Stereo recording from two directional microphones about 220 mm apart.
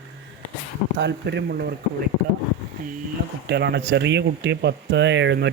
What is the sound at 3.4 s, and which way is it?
Speech, 50° right (ahead or behind).